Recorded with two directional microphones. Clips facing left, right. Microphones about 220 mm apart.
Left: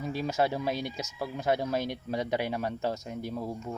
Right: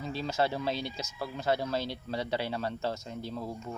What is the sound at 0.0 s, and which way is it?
Speech, 15° left (ahead or behind).